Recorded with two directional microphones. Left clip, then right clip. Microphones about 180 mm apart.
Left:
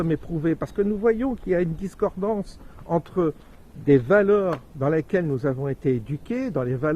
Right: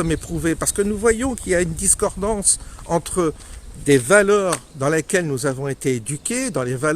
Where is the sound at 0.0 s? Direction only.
20° right (ahead or behind).